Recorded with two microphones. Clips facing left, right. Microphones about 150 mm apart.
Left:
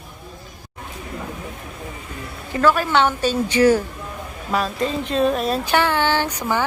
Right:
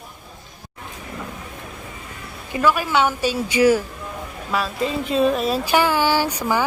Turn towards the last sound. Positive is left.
turn(degrees=-10)  # may be behind; listen again after turning